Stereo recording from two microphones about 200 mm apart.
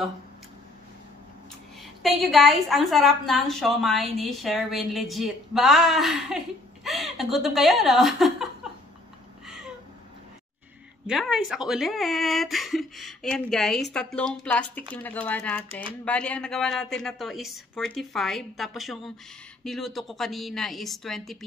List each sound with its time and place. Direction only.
1.8 s speech: centre (ahead or behind)
11.1 s speech: centre (ahead or behind)